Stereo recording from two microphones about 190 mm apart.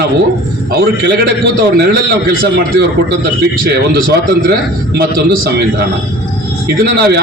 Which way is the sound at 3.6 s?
50° right (ahead or behind).